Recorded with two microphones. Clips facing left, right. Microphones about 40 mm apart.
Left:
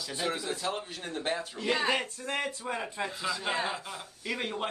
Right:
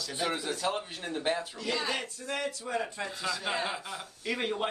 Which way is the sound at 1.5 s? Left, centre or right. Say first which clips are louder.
Left 4 dB; left.